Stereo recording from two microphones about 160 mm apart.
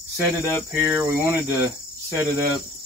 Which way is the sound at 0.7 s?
15° right (ahead or behind).